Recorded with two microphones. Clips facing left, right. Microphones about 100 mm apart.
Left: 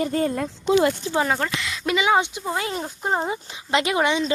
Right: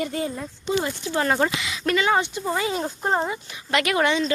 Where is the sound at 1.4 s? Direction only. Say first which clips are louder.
Right 3 dB; 5° right (ahead or behind).